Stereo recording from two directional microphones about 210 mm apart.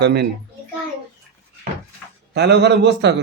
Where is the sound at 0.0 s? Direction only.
55° right (ahead or behind).